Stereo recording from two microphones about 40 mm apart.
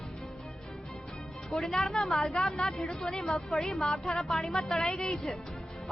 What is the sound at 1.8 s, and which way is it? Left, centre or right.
Speech, centre.